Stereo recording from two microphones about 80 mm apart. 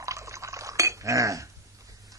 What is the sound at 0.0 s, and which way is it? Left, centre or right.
Chink, right.